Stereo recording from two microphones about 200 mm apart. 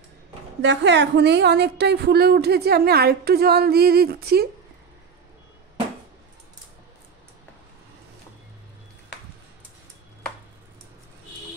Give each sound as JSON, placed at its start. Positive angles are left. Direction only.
{"t": 0.6, "sound": "a woman's voice", "side_deg": -60}